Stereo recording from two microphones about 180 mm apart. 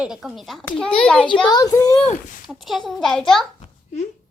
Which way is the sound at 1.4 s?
20° left (ahead or behind).